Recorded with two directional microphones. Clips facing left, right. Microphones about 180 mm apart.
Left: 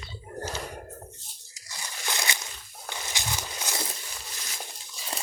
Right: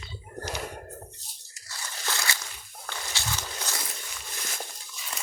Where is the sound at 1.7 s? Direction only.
15° left (ahead or behind).